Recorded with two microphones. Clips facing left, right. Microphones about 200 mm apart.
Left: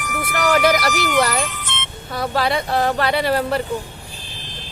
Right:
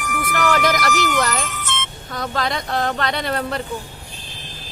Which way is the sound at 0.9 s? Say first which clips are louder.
Left 2 dB; 45° right (ahead or behind).